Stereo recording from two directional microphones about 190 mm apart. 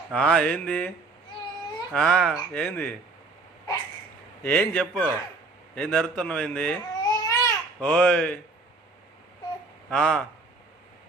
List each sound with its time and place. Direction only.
0.1 s a man's voice: 5° left (ahead or behind)
1.9 s speech: 5° left (ahead or behind)
4.4 s a man's voice: 10° left (ahead or behind)
7.0 s babbling: 20° left (ahead or behind)
9.9 s a man's voice: 10° left (ahead or behind)